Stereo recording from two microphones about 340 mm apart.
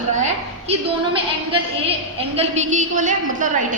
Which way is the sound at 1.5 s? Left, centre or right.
Centre.